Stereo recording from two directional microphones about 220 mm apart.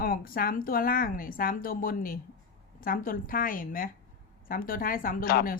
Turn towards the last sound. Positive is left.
turn(degrees=40)  # may be behind; listen again after turning